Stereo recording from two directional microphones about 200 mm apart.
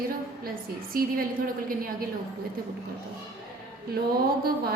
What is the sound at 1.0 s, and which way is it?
A woman's voice, 45° right (ahead or behind).